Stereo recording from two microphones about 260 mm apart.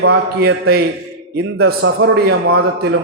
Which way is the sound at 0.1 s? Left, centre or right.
Right.